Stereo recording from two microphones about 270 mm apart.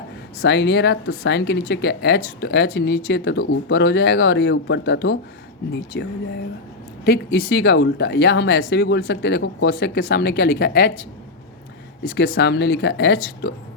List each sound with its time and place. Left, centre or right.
0.4 s speech: left
12.1 s speech: left